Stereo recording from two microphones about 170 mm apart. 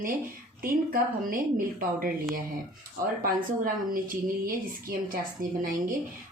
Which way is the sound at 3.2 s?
55° right (ahead or behind).